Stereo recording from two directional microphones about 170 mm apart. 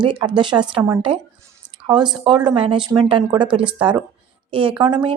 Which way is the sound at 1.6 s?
25° right (ahead or behind).